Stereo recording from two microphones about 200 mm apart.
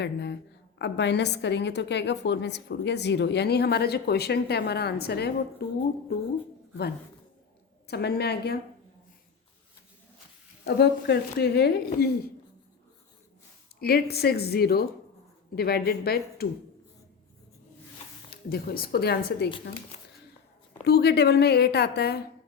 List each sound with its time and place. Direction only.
0.0 s a woman's voice: 60° left (ahead or behind)
7.9 s a woman's voice: 55° left (ahead or behind)
10.6 s a woman's voice: 55° left (ahead or behind)
13.7 s a woman's voice: 50° left (ahead or behind)
18.3 s a woman's voice: 50° left (ahead or behind)
19.5 s speech: 25° left (ahead or behind)
20.8 s a woman's voice: 55° left (ahead or behind)